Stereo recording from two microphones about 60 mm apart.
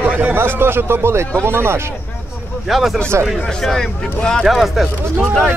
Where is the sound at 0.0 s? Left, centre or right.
Right.